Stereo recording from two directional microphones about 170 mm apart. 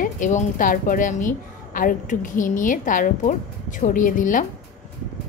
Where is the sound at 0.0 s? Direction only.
45° left (ahead or behind).